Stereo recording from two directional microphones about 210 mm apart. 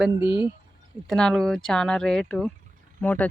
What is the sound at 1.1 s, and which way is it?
Speech, 5° left (ahead or behind).